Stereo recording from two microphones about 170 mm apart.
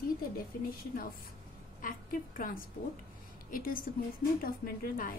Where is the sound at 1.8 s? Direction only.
55° left (ahead or behind).